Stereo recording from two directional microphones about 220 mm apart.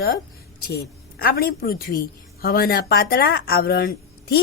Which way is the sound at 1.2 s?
45° left (ahead or behind).